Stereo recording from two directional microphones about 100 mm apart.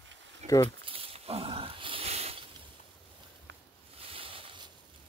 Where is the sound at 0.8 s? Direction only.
70° right (ahead or behind); by 2.4 s 90° right.